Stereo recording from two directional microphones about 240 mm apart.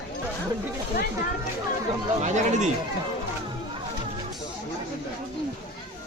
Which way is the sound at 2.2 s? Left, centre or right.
Right.